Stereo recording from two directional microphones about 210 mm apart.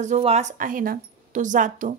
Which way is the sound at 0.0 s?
30° right (ahead or behind).